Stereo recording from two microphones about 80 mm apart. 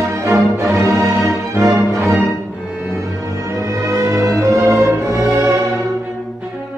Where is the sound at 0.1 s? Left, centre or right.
Right.